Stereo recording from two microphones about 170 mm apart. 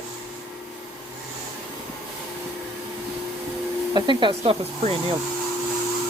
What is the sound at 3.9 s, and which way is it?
Speech, 25° right (ahead or behind).